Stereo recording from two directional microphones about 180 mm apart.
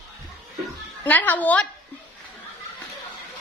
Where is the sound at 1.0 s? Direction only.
10° left (ahead or behind).